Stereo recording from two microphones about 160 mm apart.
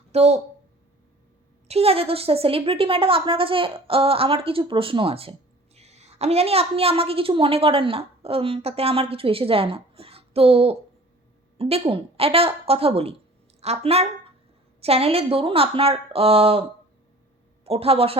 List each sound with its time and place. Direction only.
0.1 s speech: 40° right (ahead or behind)
1.6 s a woman's voice: 40° right (ahead or behind)
17.7 s a woman's voice: 35° right (ahead or behind)